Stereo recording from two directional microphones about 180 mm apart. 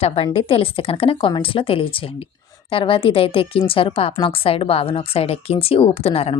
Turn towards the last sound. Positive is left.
turn(degrees=35)  # may be behind; listen again after turning